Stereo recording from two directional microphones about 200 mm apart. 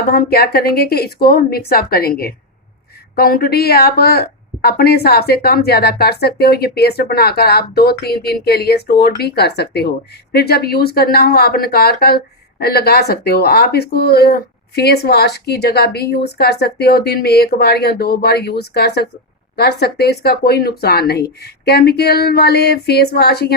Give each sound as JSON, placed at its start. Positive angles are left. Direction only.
{"t": 0.1, "sound": "a woman's voice", "side_deg": 50}